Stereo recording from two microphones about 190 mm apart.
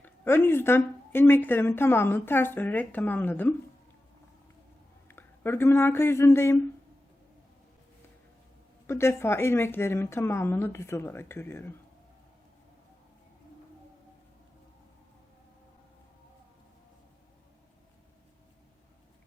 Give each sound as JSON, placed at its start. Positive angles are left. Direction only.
{"t": 0.0, "sound": "speech", "side_deg": 10}
{"t": 5.0, "sound": "speech", "side_deg": 10}
{"t": 8.9, "sound": "speech", "side_deg": 15}